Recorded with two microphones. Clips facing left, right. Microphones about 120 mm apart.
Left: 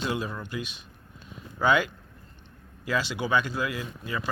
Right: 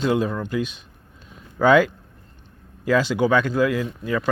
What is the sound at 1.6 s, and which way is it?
Speech, 40° right (ahead or behind).